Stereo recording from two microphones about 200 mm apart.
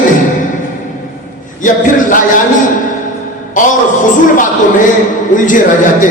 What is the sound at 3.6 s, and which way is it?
Speech, 40° left (ahead or behind).